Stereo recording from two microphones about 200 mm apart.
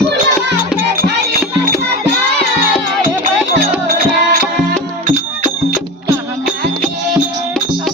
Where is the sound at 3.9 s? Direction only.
50° right (ahead or behind).